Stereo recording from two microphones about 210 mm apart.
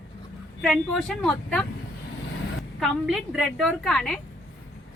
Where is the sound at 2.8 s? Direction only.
Centre (ahead or behind).